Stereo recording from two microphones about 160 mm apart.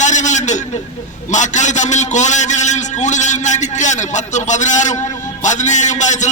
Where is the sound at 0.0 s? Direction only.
50° left (ahead or behind).